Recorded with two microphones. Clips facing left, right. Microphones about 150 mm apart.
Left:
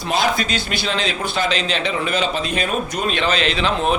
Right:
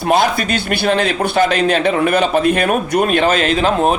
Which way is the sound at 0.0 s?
55° right (ahead or behind).